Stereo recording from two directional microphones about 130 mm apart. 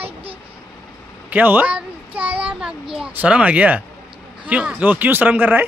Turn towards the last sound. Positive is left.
turn(degrees=-15)  # may be behind; listen again after turning